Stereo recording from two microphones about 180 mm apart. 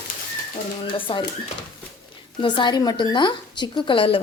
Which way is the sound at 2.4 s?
25° left (ahead or behind).